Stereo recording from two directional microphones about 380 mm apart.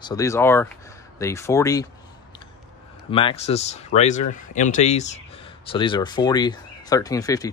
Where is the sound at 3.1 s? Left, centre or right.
Centre.